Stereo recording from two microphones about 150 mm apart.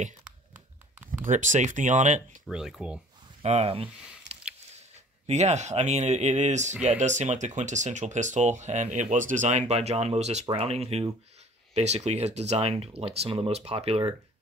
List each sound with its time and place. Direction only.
1.2 s speech: 55° right (ahead or behind)
2.4 s speech: centre (ahead or behind)
3.4 s speech: 40° right (ahead or behind)
4.3 s a sound: 45° right (ahead or behind)
4.7 s speech: 50° right (ahead or behind)